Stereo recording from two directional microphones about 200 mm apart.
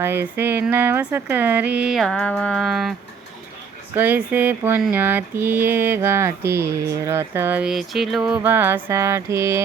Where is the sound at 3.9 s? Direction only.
10° right (ahead or behind).